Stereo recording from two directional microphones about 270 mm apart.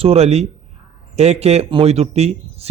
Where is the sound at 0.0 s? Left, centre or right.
Right.